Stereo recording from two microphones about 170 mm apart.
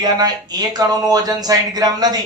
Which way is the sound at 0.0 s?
25° right (ahead or behind).